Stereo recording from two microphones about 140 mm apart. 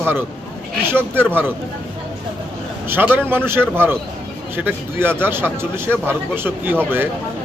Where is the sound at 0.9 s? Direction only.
15° right (ahead or behind).